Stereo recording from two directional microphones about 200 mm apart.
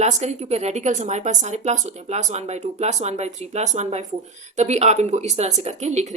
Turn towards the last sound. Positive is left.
turn(degrees=-35)  # may be behind; listen again after turning